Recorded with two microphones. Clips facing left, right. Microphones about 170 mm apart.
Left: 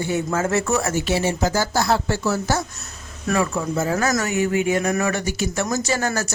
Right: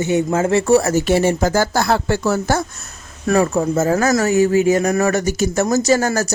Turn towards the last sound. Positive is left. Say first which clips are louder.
# right 7 dB
turn(degrees=-40)  # may be behind; listen again after turning